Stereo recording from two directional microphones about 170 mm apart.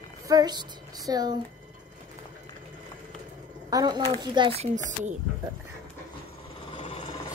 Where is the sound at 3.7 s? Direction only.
25° right (ahead or behind); by 5.1 s 45° right (ahead or behind).